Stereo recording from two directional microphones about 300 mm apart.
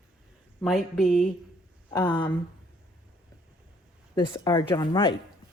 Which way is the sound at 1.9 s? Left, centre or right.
Centre.